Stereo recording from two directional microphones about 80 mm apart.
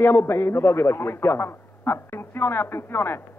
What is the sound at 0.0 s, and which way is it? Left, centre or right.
A man's voice, left.